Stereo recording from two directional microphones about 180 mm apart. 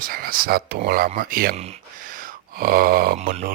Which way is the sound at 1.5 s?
35° right (ahead or behind).